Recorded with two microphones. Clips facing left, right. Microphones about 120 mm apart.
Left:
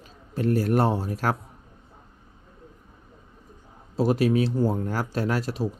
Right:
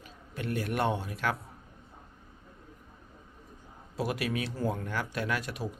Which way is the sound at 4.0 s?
30° left (ahead or behind).